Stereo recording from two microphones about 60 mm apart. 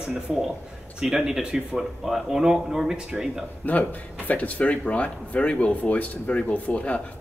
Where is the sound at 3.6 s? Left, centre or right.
Left.